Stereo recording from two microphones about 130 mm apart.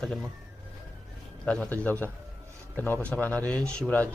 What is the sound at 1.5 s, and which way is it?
Speech, 10° left (ahead or behind).